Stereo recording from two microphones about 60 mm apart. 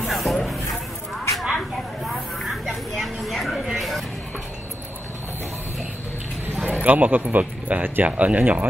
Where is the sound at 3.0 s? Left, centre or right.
Centre.